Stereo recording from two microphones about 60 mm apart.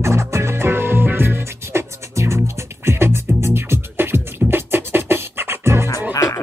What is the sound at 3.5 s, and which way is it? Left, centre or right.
Beatboxing, right.